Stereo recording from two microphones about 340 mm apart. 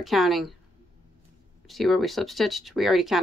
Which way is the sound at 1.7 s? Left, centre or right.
Centre.